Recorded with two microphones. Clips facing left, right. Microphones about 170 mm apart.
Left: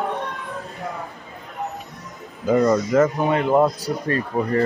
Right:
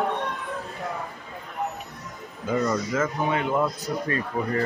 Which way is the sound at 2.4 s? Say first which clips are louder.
Left 7 dB; 40° left (ahead or behind).